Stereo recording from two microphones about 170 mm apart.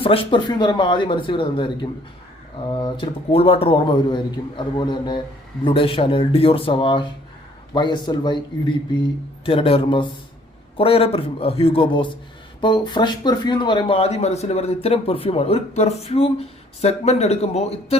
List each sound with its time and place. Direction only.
0.0 s speech: 30° left (ahead or behind)